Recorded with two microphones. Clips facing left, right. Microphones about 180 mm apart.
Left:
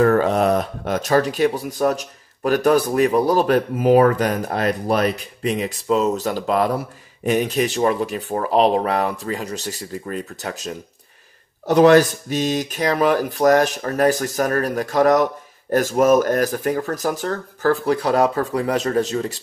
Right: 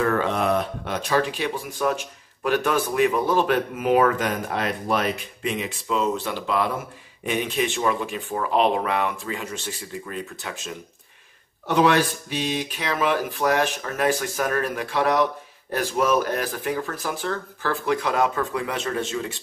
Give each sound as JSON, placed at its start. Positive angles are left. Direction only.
{"t": 0.0, "sound": "speech", "side_deg": 40}